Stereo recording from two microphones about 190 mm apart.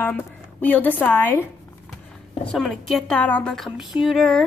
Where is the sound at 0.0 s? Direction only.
10° left (ahead or behind).